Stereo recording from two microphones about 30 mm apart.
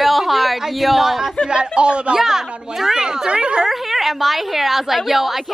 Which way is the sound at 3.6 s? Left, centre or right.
Centre.